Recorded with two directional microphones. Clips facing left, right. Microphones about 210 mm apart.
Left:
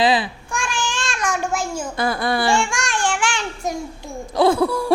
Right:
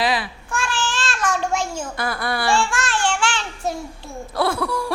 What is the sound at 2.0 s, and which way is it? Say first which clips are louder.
Speech: left 5 dB; 25° left (ahead or behind).